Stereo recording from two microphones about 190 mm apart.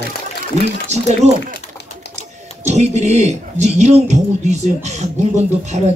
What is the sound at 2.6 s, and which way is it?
Music, 35° right (ahead or behind).